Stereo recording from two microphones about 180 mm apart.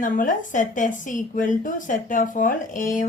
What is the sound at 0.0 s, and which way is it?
A woman's voice, 45° left (ahead or behind).